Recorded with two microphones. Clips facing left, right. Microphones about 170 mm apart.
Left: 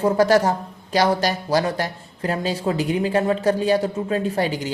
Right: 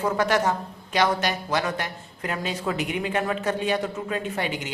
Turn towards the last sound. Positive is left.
turn(degrees=35)  # may be behind; listen again after turning